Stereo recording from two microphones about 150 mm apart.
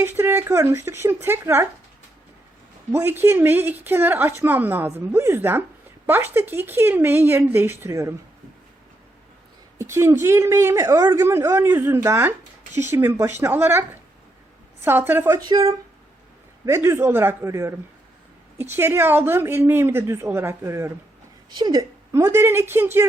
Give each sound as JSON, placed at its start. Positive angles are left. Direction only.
{"t": 0.0, "sound": "a woman's voice", "side_deg": -15}
{"t": 2.9, "sound": "a woman's voice", "side_deg": -15}
{"t": 9.7, "sound": "a woman's voice", "side_deg": -20}
{"t": 14.8, "sound": "a woman's voice", "side_deg": -15}
{"t": 16.6, "sound": "a woman's voice", "side_deg": -20}